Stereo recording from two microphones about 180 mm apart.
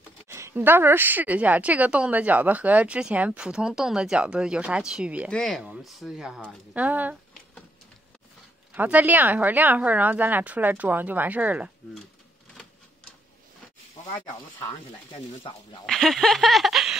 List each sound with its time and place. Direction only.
0.3 s a woman's voice: 15° right (ahead or behind)
8.7 s a woman's voice: 10° right (ahead or behind)
15.1 s speech: 30° left (ahead or behind)
15.8 s snicker: centre (ahead or behind)